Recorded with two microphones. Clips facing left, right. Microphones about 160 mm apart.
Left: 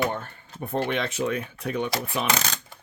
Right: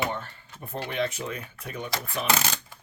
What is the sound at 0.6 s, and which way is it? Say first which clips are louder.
Speech: left 3 dB; 65° left (ahead or behind).